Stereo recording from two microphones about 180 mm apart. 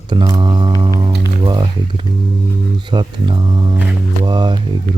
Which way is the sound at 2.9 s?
25° right (ahead or behind).